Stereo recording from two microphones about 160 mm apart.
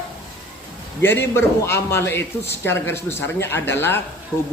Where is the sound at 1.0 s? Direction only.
15° left (ahead or behind).